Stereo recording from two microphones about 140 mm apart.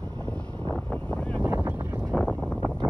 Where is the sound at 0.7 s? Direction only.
10° left (ahead or behind).